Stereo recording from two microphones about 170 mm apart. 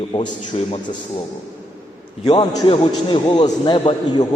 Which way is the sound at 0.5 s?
35° left (ahead or behind).